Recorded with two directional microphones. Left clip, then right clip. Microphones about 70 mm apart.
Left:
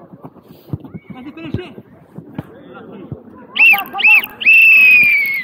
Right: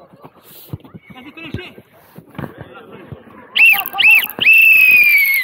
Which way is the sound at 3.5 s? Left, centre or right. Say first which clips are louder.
Even; right.